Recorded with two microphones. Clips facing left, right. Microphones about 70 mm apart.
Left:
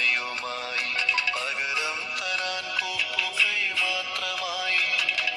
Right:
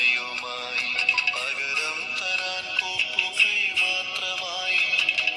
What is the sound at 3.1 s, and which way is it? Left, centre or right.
Music, left.